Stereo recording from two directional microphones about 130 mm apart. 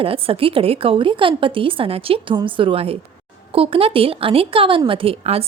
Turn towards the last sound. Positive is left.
turn(degrees=-50)  # may be behind; listen again after turning